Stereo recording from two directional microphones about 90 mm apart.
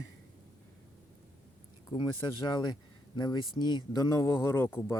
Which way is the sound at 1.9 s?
55° left (ahead or behind).